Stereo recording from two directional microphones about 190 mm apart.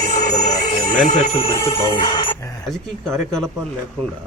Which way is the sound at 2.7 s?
Centre (ahead or behind).